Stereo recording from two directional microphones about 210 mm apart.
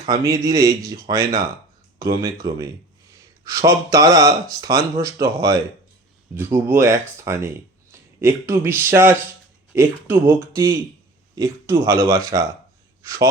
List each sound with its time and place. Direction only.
0.0 s speech: 20° right (ahead or behind)